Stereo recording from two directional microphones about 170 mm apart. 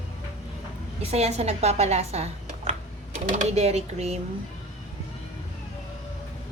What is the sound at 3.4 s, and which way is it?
Speech, 40° right (ahead or behind).